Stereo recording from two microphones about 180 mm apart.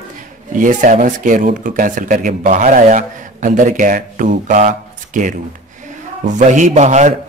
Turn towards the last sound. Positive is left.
turn(degrees=-40)  # may be behind; listen again after turning